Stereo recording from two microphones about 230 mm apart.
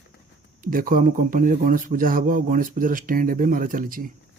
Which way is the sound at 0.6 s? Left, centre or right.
Right.